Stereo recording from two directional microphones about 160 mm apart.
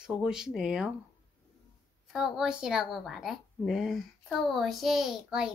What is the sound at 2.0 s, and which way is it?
A woman's voice, centre (ahead or behind).